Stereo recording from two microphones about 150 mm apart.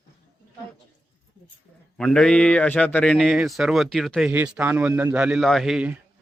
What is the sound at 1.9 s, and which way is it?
A man's voice, 5° left (ahead or behind).